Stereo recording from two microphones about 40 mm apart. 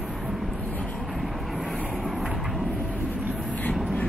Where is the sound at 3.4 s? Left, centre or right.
Left.